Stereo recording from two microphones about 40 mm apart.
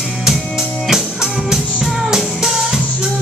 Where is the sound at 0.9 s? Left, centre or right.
Centre.